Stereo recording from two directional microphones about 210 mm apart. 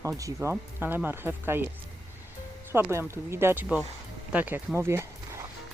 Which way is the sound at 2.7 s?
10° right (ahead or behind).